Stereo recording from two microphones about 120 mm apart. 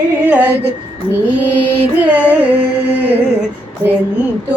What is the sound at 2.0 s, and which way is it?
Music, 15° right (ahead or behind).